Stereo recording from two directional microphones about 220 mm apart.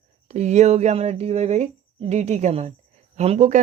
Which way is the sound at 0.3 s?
30° right (ahead or behind).